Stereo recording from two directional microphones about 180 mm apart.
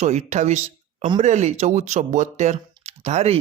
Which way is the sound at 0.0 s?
40° right (ahead or behind).